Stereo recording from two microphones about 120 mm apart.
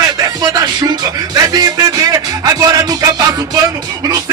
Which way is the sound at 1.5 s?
30° right (ahead or behind).